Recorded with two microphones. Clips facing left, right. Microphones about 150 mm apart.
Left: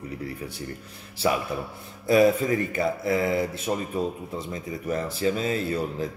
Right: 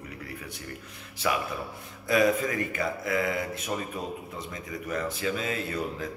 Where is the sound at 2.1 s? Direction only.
30° left (ahead or behind).